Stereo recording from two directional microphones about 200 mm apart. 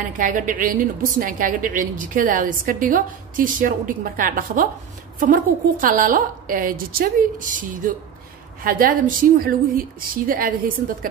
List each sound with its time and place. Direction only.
0.2 s a woman's voice: 40° right (ahead or behind)